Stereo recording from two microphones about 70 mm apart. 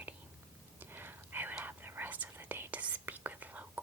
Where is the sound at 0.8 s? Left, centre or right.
Right.